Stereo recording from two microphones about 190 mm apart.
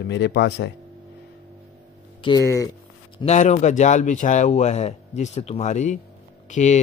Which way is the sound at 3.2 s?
35° left (ahead or behind).